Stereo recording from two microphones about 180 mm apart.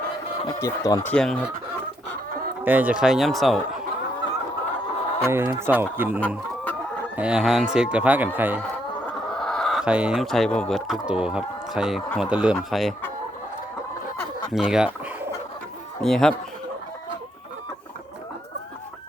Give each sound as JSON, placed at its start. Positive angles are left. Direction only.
{"t": 0.6, "sound": "speech", "side_deg": 20}
{"t": 1.1, "sound": "speech", "side_deg": 0}
{"t": 2.6, "sound": "speech", "side_deg": -10}
{"t": 5.2, "sound": "speech", "side_deg": -15}
{"t": 9.4, "sound": "speech", "side_deg": 5}
{"t": 14.5, "sound": "fowl", "side_deg": -5}
{"t": 16.0, "sound": "speech", "side_deg": 0}